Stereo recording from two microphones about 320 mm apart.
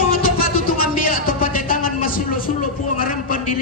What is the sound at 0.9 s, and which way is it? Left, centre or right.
Speech, left.